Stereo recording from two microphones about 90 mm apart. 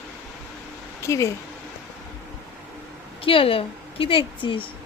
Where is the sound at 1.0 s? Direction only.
35° left (ahead or behind).